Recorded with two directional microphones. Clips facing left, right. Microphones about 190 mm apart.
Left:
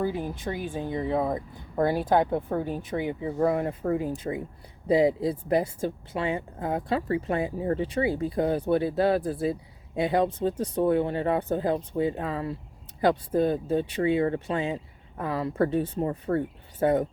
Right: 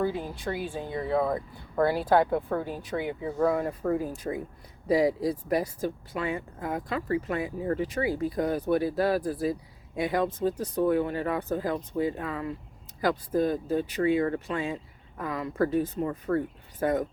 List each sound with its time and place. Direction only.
0.0 s speech: 20° left (ahead or behind)